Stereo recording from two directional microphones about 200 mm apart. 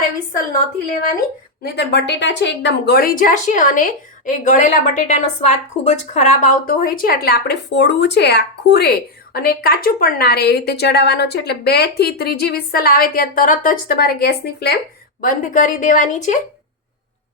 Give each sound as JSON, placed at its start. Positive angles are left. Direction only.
{"t": 1.6, "sound": "a woman's voice", "side_deg": 60}
{"t": 15.2, "sound": "a woman's voice", "side_deg": 40}